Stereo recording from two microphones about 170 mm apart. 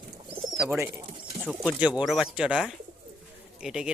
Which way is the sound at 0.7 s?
15° right (ahead or behind).